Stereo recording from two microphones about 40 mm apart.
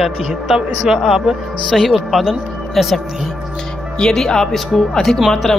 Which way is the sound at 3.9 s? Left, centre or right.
Centre.